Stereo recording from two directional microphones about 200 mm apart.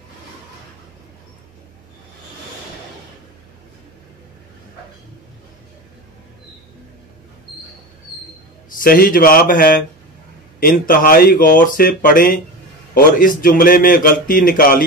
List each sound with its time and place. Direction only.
8.6 s speech: 45° left (ahead or behind)